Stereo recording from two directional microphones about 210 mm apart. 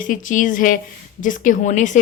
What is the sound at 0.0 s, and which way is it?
A woman's voice, 40° left (ahead or behind).